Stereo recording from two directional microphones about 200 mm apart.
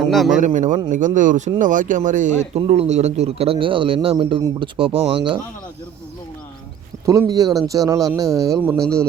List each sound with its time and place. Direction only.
0.1 s speech: centre (ahead or behind)
0.3 s speech: 40° right (ahead or behind)
7.0 s speech: 15° right (ahead or behind)
8.7 s speech: 5° left (ahead or behind)